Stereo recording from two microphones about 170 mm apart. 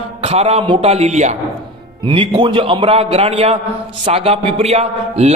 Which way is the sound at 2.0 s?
30° right (ahead or behind).